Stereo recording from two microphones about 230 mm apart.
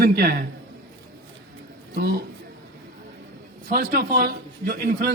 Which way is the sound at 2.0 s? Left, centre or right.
Right.